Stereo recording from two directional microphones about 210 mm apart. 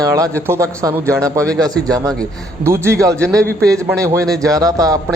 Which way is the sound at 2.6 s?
15° right (ahead or behind).